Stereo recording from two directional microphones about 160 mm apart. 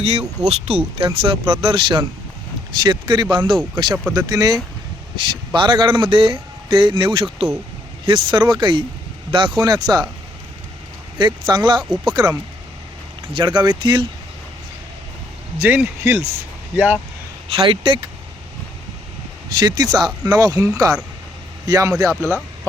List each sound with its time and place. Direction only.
0.0 s speech: 40° right (ahead or behind)
11.2 s speech: 30° right (ahead or behind)
13.3 s speech: 30° right (ahead or behind)
15.5 s speech: 10° right (ahead or behind)
17.5 s speech: 35° right (ahead or behind)
19.5 s speech: 25° right (ahead or behind)